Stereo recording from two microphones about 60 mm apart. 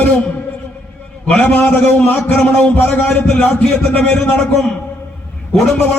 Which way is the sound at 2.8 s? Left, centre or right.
Left.